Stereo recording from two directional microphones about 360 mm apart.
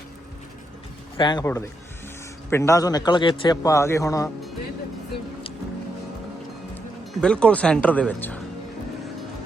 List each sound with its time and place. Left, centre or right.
1.1 s speech: centre
7.1 s speech: centre